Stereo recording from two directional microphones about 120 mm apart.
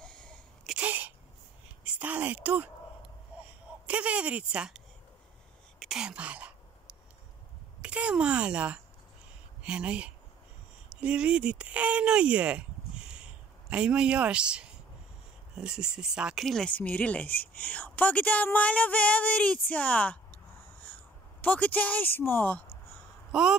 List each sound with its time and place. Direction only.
0.0 s a sound: 5° left (ahead or behind)
0.7 s sneeze: 15° right (ahead or behind)
1.9 s a sound: 10° right (ahead or behind)
3.8 s speech: 10° right (ahead or behind)
5.8 s whispering: 5° right (ahead or behind)
7.8 s speech: 10° right (ahead or behind); by 20.3 s 10° left (ahead or behind)
21.4 s speech: 15° left (ahead or behind)